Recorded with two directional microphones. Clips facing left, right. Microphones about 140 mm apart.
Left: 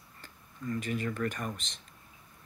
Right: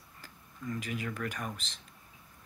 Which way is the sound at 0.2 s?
5° right (ahead or behind).